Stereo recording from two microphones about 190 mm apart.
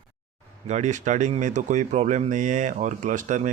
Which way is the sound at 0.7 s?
40° right (ahead or behind).